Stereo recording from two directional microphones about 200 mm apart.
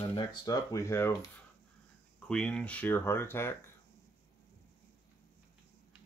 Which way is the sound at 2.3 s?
5° left (ahead or behind).